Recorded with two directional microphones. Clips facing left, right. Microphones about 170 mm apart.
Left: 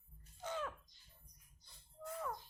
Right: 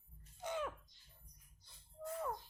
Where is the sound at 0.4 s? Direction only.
15° right (ahead or behind).